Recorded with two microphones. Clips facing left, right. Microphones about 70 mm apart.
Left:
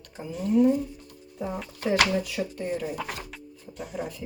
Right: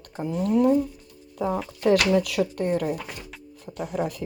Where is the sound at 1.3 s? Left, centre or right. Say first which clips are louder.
Right 6 dB; right.